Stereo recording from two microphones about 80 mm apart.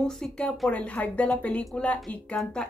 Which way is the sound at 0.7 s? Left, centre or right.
Centre.